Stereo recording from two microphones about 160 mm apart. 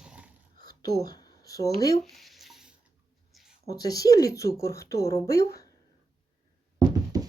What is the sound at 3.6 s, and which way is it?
Speech, 25° left (ahead or behind).